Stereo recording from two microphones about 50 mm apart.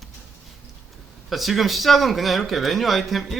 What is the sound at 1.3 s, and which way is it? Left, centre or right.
Speech, centre.